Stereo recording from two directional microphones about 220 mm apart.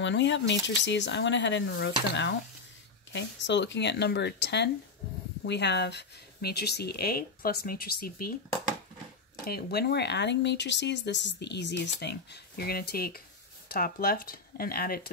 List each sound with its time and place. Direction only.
0.0 s speech: 55° left (ahead or behind)
9.5 s speech: 45° left (ahead or behind)